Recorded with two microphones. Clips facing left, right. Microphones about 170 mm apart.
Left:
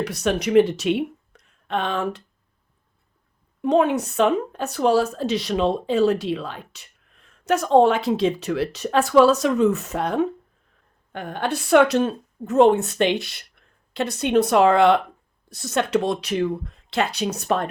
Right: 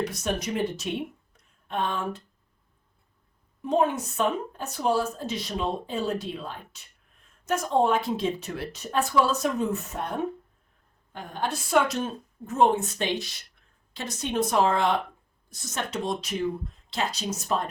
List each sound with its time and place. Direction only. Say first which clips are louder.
0.0 s speech: left 6 dB; 70° left (ahead or behind)
3.6 s a woman's voice: left 6 dB; 75° left (ahead or behind); by 10.2 s 90° left
11.1 s a woman's voice: left 5 dB; 65° left (ahead or behind)